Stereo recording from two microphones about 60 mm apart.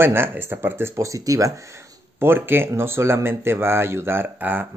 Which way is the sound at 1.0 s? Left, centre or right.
Right.